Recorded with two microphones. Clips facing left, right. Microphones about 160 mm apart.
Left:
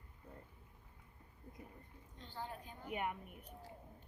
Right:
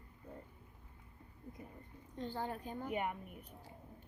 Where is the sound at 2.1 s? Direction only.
50° right (ahead or behind).